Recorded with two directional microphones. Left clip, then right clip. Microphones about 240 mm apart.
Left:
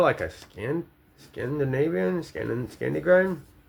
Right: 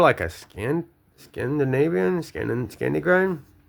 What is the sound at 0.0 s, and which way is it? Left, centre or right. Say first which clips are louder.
Speech: right 4 dB; right.